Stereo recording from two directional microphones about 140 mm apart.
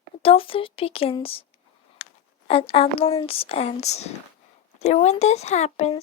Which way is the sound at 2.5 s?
45° left (ahead or behind).